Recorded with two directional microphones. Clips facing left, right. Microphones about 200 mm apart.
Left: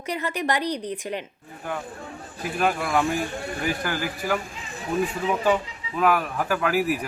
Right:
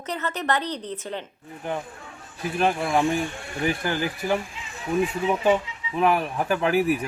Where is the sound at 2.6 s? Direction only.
25° right (ahead or behind).